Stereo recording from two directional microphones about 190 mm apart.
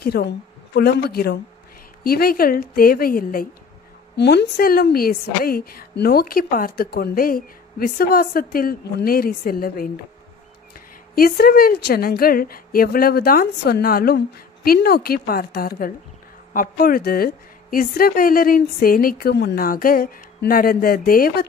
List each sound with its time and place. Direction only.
0.0 s a woman's voice: 55° left (ahead or behind)
4.2 s a woman's voice: 60° left (ahead or behind)
11.1 s a woman's voice: 50° left (ahead or behind)